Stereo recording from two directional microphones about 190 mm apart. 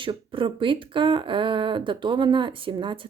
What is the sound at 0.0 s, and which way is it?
Speech, 25° right (ahead or behind).